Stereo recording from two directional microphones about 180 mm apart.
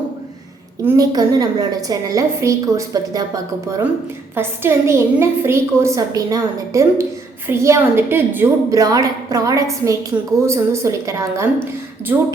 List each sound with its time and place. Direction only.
0.9 s a woman's voice: 20° right (ahead or behind)